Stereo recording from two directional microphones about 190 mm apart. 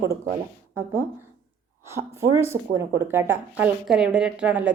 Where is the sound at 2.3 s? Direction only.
15° right (ahead or behind).